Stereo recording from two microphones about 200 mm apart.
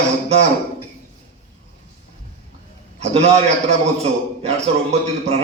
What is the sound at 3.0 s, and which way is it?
A man's voice, 35° right (ahead or behind).